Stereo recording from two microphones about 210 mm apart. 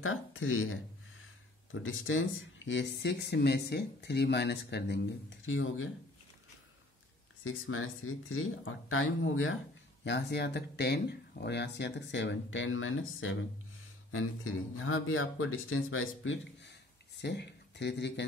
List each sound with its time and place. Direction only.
0.0 s speech: 75° left (ahead or behind)
2.6 s speech: 55° left (ahead or behind)
7.4 s speech: 75° left (ahead or behind)
10.0 s speech: 55° left (ahead or behind); by 13.4 s 70° left (ahead or behind)
14.1 s speech: 80° left; by 18.2 s 55° left (ahead or behind)